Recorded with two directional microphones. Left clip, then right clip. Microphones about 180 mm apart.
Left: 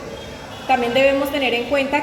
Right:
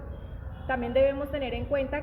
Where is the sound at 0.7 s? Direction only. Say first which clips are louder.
Left 9 dB; 30° right (ahead or behind).